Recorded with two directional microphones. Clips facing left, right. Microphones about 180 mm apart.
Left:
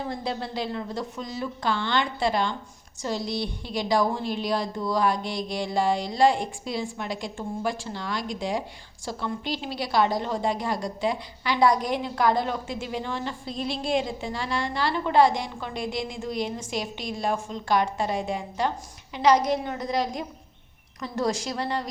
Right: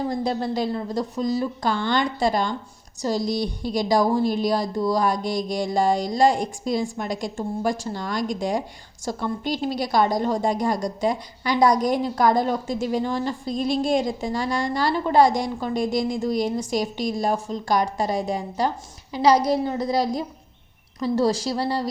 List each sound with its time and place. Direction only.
0.1 s a woman's voice: 40° right (ahead or behind)